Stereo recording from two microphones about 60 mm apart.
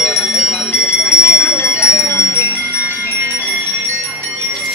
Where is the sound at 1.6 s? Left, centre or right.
Left.